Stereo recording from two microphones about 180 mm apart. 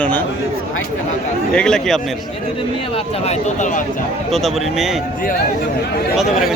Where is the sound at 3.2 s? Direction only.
40° left (ahead or behind).